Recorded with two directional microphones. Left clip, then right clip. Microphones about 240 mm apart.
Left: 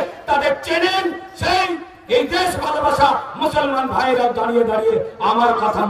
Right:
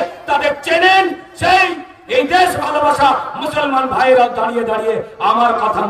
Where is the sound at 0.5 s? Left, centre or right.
Centre.